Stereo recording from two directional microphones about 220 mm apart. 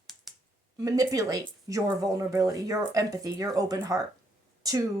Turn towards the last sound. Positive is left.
turn(degrees=-15)  # may be behind; listen again after turning